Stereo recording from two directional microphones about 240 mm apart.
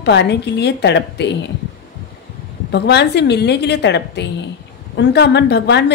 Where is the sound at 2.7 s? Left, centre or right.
Left.